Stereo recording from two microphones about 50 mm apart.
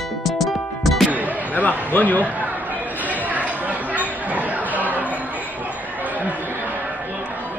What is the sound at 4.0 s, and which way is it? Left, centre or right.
Chatter, right.